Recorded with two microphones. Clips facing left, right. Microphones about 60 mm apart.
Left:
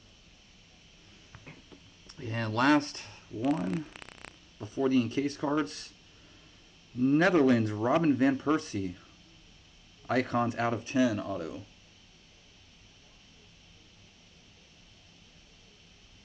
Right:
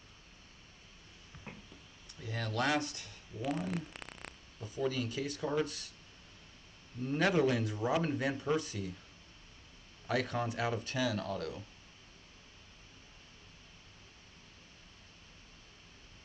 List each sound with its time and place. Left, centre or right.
2.0 s speech: left
3.4 s a sound: centre
4.6 s speech: left
7.0 s speech: left
10.0 s speech: left
10.8 s speech: centre